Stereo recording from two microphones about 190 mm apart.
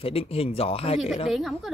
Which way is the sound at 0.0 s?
30° left (ahead or behind).